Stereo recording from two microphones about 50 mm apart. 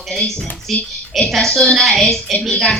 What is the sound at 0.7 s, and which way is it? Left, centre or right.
Speech, centre.